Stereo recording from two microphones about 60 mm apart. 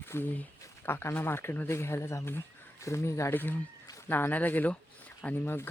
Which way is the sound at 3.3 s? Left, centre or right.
Left.